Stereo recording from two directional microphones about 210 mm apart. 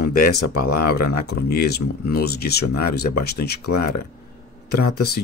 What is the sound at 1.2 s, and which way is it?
Speech, 50° left (ahead or behind).